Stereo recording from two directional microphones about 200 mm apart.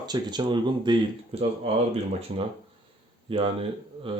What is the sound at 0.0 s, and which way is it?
Speech, 20° right (ahead or behind).